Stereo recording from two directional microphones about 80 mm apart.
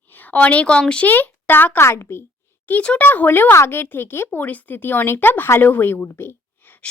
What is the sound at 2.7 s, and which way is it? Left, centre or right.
A woman's voice, centre.